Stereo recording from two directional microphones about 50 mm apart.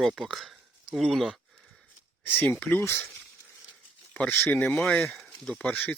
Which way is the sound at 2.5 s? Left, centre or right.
Left.